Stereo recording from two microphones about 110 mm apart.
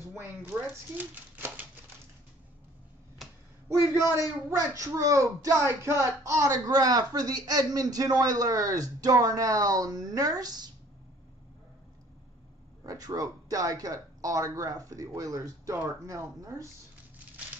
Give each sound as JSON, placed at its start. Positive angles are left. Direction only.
{"t": 0.0, "sound": "speech", "side_deg": -20}
{"t": 4.1, "sound": "speech", "side_deg": -25}
{"t": 12.8, "sound": "speech", "side_deg": -35}